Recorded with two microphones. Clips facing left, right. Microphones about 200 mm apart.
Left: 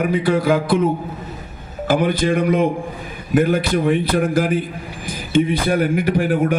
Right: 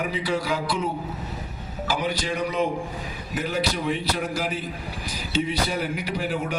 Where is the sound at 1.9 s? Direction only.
55° left (ahead or behind).